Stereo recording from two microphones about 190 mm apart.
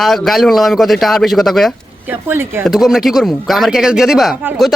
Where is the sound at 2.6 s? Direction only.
Centre (ahead or behind).